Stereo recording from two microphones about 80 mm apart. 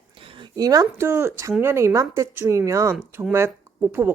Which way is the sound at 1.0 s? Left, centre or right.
Right.